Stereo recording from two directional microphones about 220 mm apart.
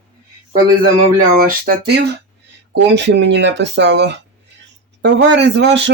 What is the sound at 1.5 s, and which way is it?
Speech, 45° right (ahead or behind).